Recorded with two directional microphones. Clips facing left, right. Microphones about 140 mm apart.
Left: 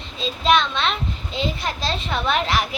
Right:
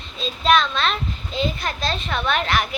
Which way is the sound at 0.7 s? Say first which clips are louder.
Even; 25° left (ahead or behind).